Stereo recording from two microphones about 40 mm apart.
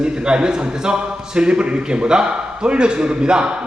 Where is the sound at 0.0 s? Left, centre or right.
Right.